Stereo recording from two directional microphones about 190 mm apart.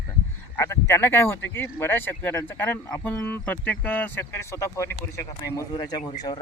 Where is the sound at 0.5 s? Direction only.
15° left (ahead or behind).